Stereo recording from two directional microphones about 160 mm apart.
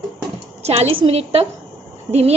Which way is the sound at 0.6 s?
40° right (ahead or behind).